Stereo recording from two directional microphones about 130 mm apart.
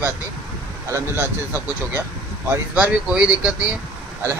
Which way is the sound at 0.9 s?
20° right (ahead or behind).